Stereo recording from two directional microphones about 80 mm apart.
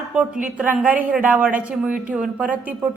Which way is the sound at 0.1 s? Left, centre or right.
Centre.